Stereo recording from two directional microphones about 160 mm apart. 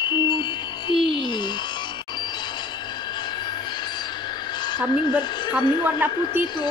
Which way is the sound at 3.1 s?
30° left (ahead or behind).